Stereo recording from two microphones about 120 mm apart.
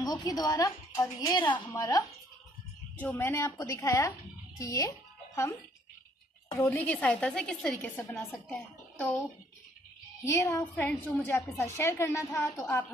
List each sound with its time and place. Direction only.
0.0 s a woman's voice: 35° left (ahead or behind)
1.3 s a woman's voice: 40° left (ahead or behind)
3.0 s a woman's voice: 15° left (ahead or behind)
7.9 s a woman's voice: 20° left (ahead or behind)
10.2 s a woman's voice: 25° left (ahead or behind)